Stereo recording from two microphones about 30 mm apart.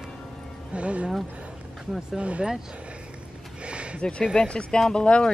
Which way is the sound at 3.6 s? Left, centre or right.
Right.